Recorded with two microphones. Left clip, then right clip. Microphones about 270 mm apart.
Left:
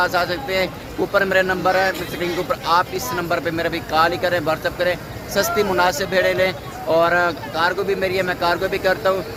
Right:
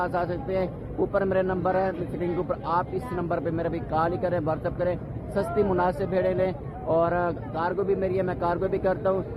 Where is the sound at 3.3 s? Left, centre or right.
Centre.